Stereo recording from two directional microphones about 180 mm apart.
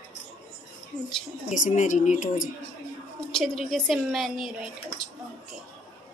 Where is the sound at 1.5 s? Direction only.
45° left (ahead or behind).